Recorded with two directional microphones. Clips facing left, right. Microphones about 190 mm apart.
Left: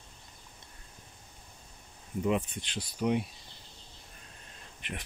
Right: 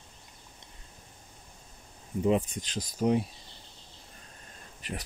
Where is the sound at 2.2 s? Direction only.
35° right (ahead or behind).